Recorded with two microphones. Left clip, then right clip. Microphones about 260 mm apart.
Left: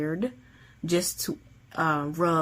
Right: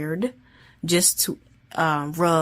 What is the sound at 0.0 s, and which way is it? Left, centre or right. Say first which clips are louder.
Speech: right 3 dB; right.